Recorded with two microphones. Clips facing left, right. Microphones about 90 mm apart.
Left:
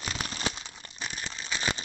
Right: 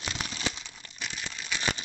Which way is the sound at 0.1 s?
40° left (ahead or behind).